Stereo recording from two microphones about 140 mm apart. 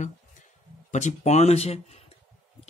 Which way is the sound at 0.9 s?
55° left (ahead or behind).